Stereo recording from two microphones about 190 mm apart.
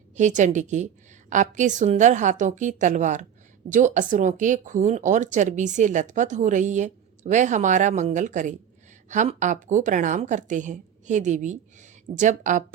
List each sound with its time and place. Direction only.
0.2 s speech: 40° right (ahead or behind)